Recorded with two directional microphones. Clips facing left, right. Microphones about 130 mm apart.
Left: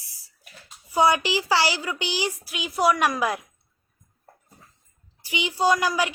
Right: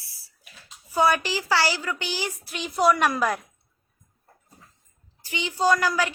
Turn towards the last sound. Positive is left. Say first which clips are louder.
# even
turn(degrees=15)  # may be behind; listen again after turning